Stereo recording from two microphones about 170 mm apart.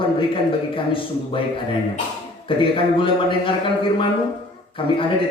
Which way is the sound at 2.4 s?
30° left (ahead or behind).